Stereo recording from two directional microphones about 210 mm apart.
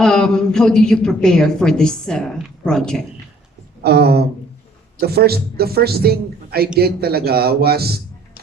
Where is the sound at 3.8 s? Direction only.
50° right (ahead or behind).